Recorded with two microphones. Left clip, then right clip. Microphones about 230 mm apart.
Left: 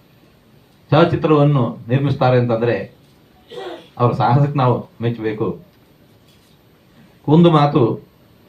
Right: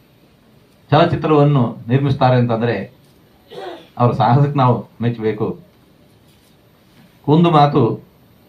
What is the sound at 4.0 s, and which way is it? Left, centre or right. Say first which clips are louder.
Speech: right 1 dB; right.